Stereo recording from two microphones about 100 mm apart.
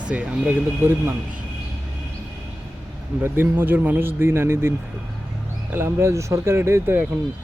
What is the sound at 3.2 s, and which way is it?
Speech, 20° right (ahead or behind).